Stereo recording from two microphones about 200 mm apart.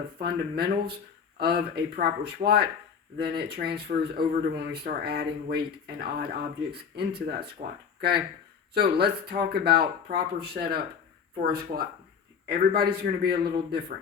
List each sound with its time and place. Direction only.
0.2 s speech: 50° right (ahead or behind)
8.7 s speech: 55° right (ahead or behind)